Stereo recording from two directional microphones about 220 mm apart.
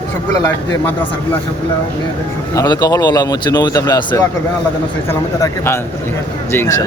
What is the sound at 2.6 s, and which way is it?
Speech, 15° left (ahead or behind).